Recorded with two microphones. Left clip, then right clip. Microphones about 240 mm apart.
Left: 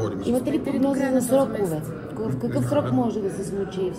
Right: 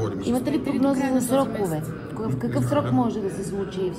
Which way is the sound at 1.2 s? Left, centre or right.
Right.